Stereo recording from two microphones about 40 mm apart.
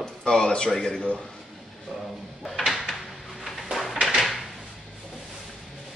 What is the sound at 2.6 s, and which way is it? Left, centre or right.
Drawer open or close, centre.